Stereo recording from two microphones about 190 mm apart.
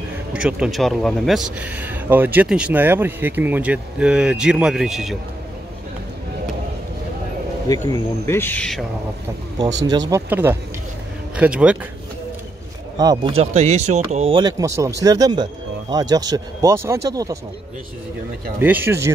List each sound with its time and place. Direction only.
0.3 s speech: 5° right (ahead or behind)
7.6 s speech: 20° left (ahead or behind)
9.8 s speech: 20° right (ahead or behind)
12.9 s speech: 20° right (ahead or behind)
18.6 s speech: 10° right (ahead or behind)